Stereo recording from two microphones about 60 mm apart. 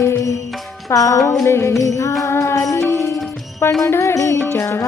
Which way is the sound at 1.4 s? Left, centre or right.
Left.